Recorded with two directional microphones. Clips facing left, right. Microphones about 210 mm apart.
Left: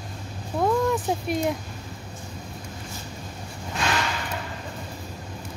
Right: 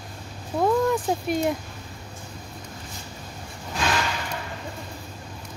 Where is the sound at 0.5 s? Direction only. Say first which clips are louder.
Right 1 dB; centre (ahead or behind).